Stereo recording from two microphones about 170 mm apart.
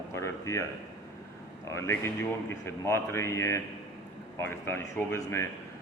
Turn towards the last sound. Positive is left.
turn(degrees=15)  # may be behind; listen again after turning